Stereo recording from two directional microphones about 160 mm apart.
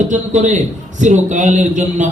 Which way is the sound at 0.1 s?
50° right (ahead or behind).